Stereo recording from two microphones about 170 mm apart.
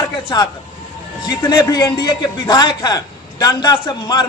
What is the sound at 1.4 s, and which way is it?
A man's voice, 20° left (ahead or behind).